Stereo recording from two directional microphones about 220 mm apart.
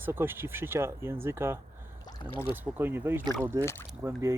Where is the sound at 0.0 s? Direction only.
10° right (ahead or behind).